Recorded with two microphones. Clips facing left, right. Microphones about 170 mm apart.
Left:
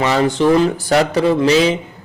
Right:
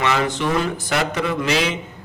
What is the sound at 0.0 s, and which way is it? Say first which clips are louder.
A man's voice: left 6 dB; 35° left (ahead or behind).